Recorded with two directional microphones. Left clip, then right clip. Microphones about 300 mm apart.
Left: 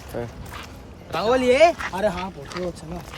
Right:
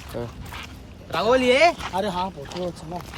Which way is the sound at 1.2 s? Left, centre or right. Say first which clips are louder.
Left 1 dB; centre.